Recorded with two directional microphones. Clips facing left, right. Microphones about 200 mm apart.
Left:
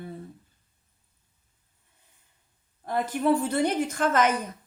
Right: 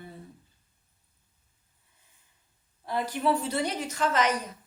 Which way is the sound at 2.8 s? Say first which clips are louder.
Left 3 dB; 50° left (ahead or behind).